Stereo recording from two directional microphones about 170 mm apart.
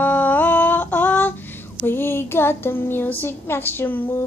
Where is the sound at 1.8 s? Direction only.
15° left (ahead or behind).